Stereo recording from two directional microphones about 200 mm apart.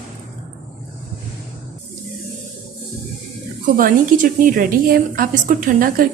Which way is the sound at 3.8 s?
45° right (ahead or behind).